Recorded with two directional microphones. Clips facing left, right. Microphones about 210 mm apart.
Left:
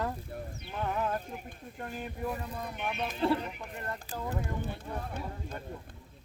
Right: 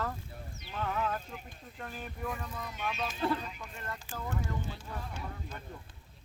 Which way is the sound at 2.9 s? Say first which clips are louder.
Left 2 dB; 60° left (ahead or behind).